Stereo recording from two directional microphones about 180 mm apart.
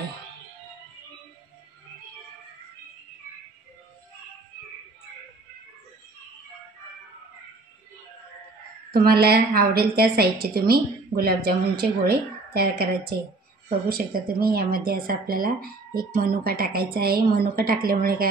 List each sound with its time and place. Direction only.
8.9 s a woman's voice: 60° right (ahead or behind)